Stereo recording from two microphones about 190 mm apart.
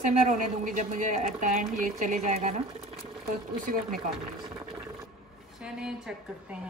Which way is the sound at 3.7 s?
45° right (ahead or behind).